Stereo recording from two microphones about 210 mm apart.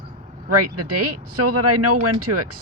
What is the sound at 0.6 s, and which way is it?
Speech, 90° right.